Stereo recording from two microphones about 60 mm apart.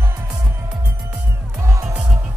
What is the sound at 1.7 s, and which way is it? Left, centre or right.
Music, right.